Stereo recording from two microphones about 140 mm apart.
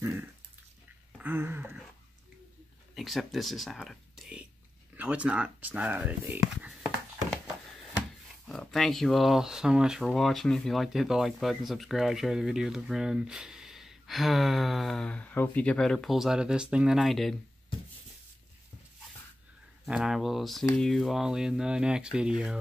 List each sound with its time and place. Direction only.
0.0 s dog: 15° right (ahead or behind)
1.1 s a sound: 15° right (ahead or behind)
3.0 s speech: centre (ahead or behind)
8.5 s speech: centre (ahead or behind)
19.9 s speech: 5° right (ahead or behind)